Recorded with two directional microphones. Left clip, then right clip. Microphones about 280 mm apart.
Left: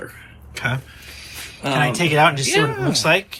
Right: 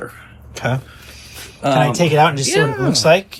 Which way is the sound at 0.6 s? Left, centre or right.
Centre.